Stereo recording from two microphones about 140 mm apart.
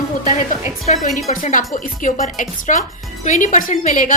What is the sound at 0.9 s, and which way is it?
A woman's voice, 60° left (ahead or behind).